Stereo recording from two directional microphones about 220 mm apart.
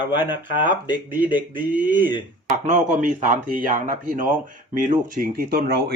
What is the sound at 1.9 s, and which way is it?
Speech, 20° left (ahead or behind).